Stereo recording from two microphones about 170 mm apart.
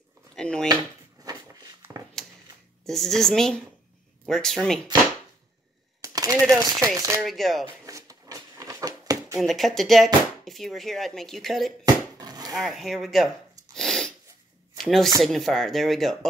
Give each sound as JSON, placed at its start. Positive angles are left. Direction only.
{"t": 0.4, "sound": "speech", "side_deg": 5}
{"t": 1.2, "sound": "a sound", "side_deg": -20}
{"t": 2.8, "sound": "speech", "side_deg": 0}
{"t": 5.9, "sound": "typewriter", "side_deg": -20}
{"t": 6.6, "sound": "speech", "side_deg": -20}
{"t": 7.2, "sound": "speech", "side_deg": 0}
{"t": 7.8, "sound": "a sound", "side_deg": -20}
{"t": 9.4, "sound": "speech", "side_deg": 0}
{"t": 11.8, "sound": "dog", "side_deg": -25}
{"t": 12.5, "sound": "speech", "side_deg": 0}
{"t": 13.7, "sound": "sneeze", "side_deg": 5}
{"t": 14.8, "sound": "speech", "side_deg": 0}